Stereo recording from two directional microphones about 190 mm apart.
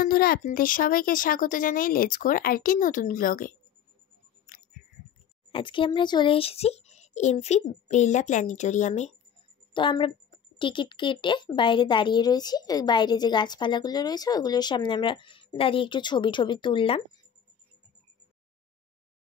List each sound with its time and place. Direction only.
0.0 s speech: 50° left (ahead or behind)
4.5 s a sound: 45° left (ahead or behind)
5.5 s a child's voice: 25° left (ahead or behind)
9.8 s speech: 25° left (ahead or behind)